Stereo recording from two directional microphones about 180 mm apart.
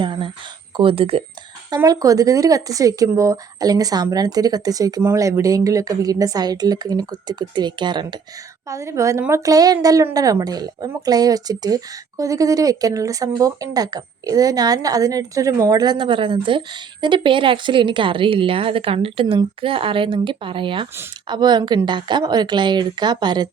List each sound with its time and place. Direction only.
0.0 s a woman's voice: 25° right (ahead or behind)
1.7 s a woman's voice: 20° right (ahead or behind)